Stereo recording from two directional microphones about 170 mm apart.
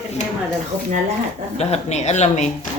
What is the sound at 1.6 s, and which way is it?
Speech, 40° left (ahead or behind).